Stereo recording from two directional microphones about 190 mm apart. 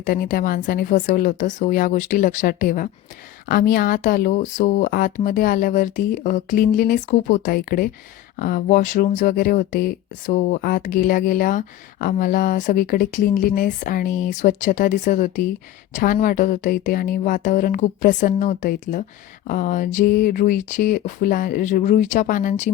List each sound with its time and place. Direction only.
0.0 s speech: 50° left (ahead or behind)